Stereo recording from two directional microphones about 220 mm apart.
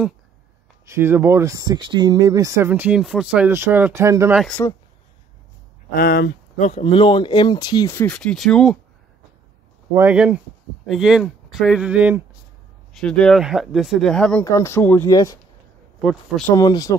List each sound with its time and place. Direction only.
0.8 s speech: 10° right (ahead or behind)
4.4 s speech: 5° left (ahead or behind)
5.9 s speech: 45° left (ahead or behind)
6.7 s speech: 25° left (ahead or behind); by 8.7 s centre (ahead or behind)
9.9 s speech: 5° right (ahead or behind); by 15.3 s 15° left (ahead or behind)
16.0 s speech: centre (ahead or behind)
16.5 s speech: 15° left (ahead or behind)